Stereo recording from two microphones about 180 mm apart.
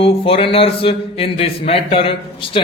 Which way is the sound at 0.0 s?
30° left (ahead or behind).